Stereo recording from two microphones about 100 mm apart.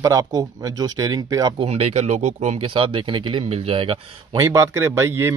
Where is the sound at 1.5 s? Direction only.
90° right; by 3.4 s 55° right (ahead or behind).